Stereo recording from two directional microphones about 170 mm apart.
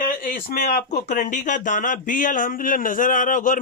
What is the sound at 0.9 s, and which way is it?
Speech, 45° left (ahead or behind).